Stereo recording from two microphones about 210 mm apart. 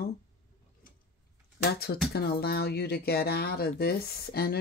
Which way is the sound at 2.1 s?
50° left (ahead or behind).